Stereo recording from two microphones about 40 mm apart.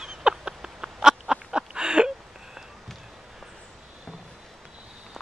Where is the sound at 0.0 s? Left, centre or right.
Centre.